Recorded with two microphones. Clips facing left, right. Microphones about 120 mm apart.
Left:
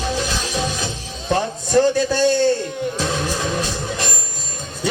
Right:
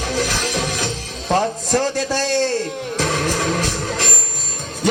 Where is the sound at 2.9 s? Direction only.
90° right.